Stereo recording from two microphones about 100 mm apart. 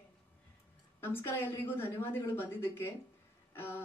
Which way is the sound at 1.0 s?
25° left (ahead or behind).